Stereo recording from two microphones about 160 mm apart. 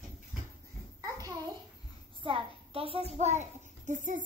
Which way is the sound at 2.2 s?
35° right (ahead or behind).